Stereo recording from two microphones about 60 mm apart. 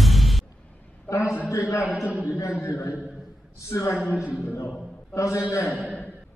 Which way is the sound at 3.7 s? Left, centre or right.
Left.